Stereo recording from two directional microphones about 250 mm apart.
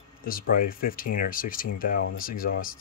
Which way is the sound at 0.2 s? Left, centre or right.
Left.